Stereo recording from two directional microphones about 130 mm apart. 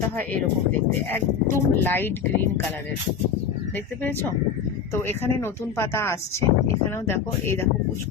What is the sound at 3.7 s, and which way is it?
Speech, 15° left (ahead or behind).